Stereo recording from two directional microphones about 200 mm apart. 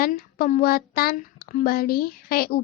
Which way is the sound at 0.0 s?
45° left (ahead or behind).